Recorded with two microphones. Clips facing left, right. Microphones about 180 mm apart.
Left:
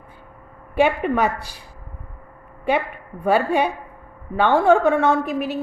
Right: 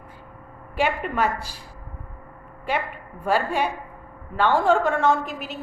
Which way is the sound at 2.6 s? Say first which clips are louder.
Left 6 dB; 60° left (ahead or behind).